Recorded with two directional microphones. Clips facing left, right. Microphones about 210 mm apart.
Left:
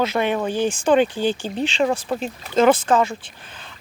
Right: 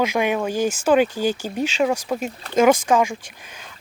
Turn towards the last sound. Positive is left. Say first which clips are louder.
# even
turn(degrees=-10)  # may be behind; listen again after turning